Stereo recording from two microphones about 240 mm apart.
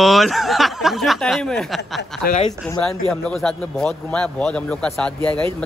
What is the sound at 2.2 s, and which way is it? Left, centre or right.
Speech, left.